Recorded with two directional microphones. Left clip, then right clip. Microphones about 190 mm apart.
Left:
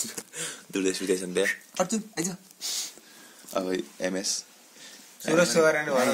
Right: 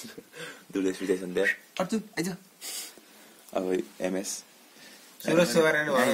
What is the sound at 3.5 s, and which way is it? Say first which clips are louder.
Speech: even; 5° right (ahead or behind).